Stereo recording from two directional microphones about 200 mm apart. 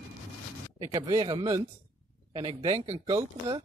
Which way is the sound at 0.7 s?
15° right (ahead or behind).